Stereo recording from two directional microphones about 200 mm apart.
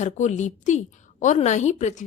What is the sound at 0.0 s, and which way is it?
A woman's voice, 35° left (ahead or behind).